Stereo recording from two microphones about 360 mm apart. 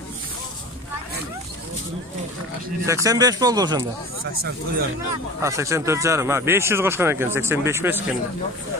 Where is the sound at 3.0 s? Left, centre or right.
Centre.